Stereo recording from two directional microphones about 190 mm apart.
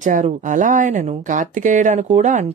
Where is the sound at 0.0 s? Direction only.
40° right (ahead or behind).